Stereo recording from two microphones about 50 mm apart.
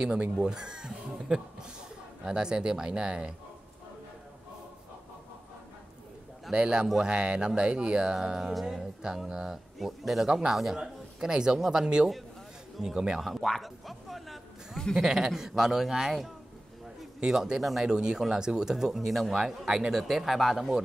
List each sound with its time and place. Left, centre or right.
0.2 s speech: centre
6.5 s a man's voice: right
8.5 s music: centre
9.0 s speech: centre
13.2 s speech: centre
17.6 s music: centre
17.8 s speech: centre